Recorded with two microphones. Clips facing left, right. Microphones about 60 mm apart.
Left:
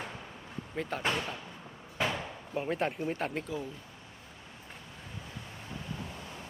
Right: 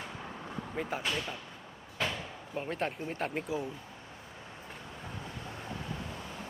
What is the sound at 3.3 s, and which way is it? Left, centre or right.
Speech, centre.